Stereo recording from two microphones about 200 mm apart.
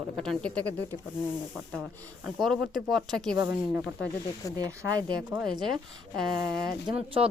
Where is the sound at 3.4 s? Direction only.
10° right (ahead or behind).